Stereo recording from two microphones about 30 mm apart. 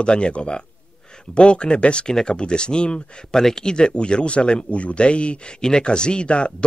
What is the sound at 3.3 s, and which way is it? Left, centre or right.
Speech, centre.